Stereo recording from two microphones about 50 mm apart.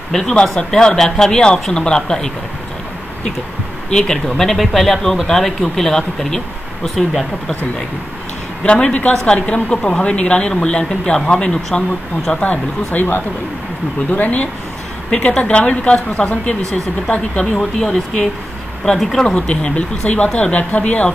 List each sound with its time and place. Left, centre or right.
0.1 s speech: centre
3.9 s speech: centre
8.6 s speech: left
12.4 s speech: left
14.1 s speech: left
15.0 s speech: centre
17.6 s speech: centre
19.2 s speech: left